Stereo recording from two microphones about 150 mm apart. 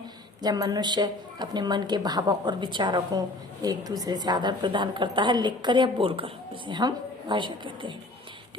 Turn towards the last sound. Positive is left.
turn(degrees=-35)  # may be behind; listen again after turning